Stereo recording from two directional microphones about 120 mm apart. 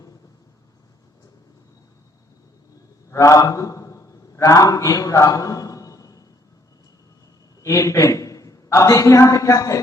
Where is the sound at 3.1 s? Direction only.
30° left (ahead or behind).